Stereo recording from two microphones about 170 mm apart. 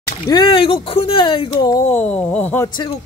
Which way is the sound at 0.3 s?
30° left (ahead or behind).